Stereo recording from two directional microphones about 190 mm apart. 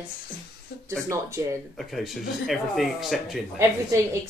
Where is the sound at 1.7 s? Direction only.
Centre (ahead or behind).